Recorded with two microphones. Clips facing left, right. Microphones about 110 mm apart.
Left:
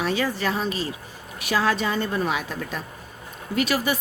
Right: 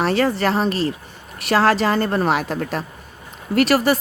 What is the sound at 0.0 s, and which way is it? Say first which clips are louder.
A woman's voice: right 6 dB; 65° right (ahead or behind).